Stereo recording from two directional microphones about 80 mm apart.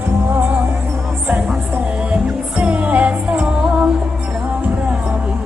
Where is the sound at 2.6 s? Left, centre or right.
Centre.